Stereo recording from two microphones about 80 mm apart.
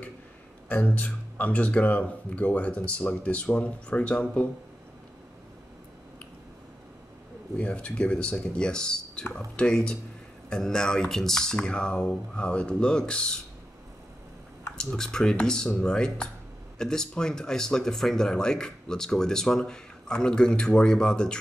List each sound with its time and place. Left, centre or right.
0.7 s speech: centre
7.5 s speech: centre
14.8 s speech: centre